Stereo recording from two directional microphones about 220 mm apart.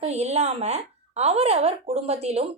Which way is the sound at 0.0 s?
30° right (ahead or behind).